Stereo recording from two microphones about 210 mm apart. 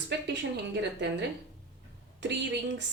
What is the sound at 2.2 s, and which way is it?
Speech, 60° right (ahead or behind).